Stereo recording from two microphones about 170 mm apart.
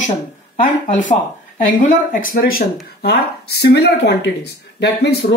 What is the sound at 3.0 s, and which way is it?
Speech, 75° left (ahead or behind).